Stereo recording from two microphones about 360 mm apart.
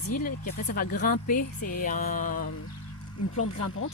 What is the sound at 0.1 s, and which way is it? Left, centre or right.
Speech, left.